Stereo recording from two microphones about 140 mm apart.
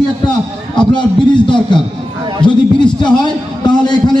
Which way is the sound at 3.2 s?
30° left (ahead or behind).